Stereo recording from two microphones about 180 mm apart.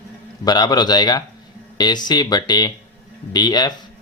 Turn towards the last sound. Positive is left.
turn(degrees=20)  # may be behind; listen again after turning